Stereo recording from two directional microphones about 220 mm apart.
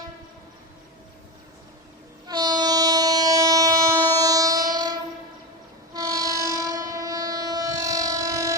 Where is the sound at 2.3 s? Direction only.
20° right (ahead or behind).